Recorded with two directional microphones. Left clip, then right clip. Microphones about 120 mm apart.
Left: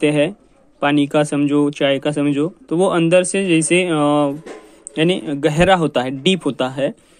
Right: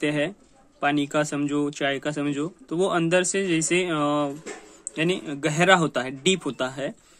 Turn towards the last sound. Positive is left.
turn(degrees=40)  # may be behind; listen again after turning